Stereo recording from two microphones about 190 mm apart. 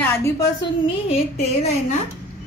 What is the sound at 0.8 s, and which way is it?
Speech, 30° left (ahead or behind).